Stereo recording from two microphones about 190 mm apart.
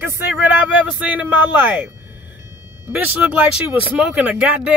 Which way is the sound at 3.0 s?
5° right (ahead or behind).